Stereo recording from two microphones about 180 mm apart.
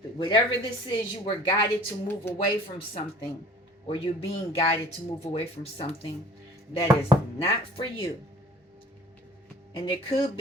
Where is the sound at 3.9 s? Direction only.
30° left (ahead or behind).